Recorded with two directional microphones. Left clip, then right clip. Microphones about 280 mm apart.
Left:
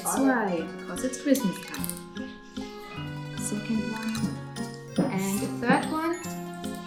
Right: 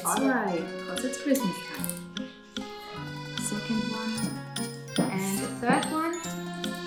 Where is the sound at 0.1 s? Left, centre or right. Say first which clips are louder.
Left 1 dB; centre.